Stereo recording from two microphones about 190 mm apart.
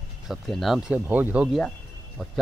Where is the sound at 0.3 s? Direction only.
Centre (ahead or behind).